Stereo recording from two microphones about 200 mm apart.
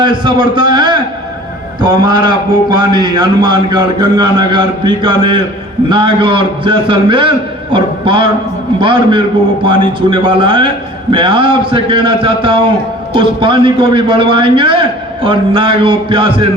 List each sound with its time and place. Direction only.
0.0 s a man's voice: 25° right (ahead or behind)